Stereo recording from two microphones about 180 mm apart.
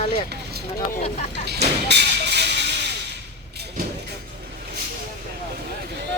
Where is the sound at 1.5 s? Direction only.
70° right (ahead or behind).